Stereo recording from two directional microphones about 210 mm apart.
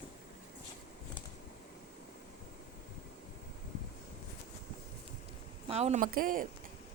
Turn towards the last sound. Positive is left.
turn(degrees=-40)  # may be behind; listen again after turning